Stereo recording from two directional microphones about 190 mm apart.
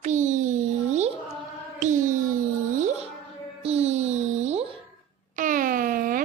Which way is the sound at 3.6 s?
35° right (ahead or behind).